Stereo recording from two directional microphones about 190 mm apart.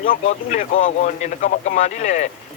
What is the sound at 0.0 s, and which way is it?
A man's voice, 45° left (ahead or behind).